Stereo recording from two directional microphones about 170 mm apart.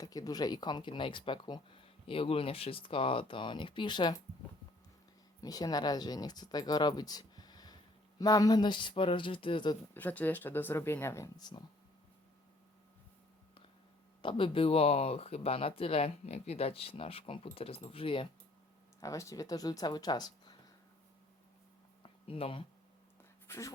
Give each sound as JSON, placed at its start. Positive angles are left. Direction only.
{"t": 0.0, "sound": "speech", "side_deg": 20}
{"t": 5.4, "sound": "speech", "side_deg": 20}
{"t": 9.9, "sound": "speech", "side_deg": 10}
{"t": 14.2, "sound": "speech", "side_deg": 30}
{"t": 18.9, "sound": "speech", "side_deg": 20}
{"t": 22.0, "sound": "a sound", "side_deg": 35}
{"t": 23.5, "sound": "speech", "side_deg": 15}